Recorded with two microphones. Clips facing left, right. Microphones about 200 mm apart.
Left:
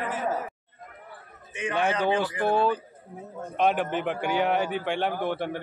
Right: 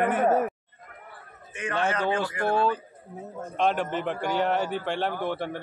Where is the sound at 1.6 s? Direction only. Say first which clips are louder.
Left 1 dB; 15° left (ahead or behind).